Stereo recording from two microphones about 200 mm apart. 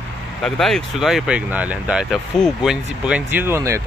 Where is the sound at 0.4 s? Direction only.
Centre (ahead or behind).